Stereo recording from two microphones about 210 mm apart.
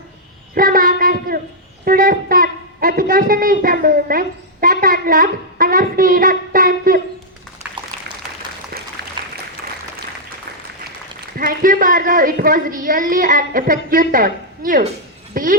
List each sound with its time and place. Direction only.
0.5 s child singing: 40° right (ahead or behind)
1.8 s speech: 45° right (ahead or behind)
8.7 s a sound: 45° right (ahead or behind)
11.3 s a woman's voice: 40° right (ahead or behind)